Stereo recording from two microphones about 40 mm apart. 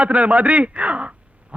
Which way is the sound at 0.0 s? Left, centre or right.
Right.